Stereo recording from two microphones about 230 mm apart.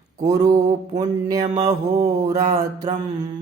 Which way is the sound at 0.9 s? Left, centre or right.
Centre.